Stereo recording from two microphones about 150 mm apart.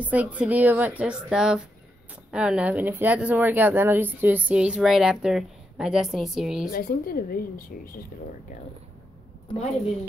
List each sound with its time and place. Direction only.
0.0 s speech: 10° right (ahead or behind)
6.7 s a woman's voice: 80° left